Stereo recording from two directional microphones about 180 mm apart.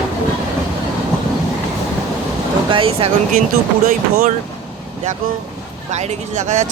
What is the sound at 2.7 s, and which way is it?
Vehicle, 30° right (ahead or behind).